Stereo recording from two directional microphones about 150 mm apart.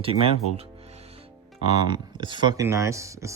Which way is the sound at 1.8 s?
30° right (ahead or behind).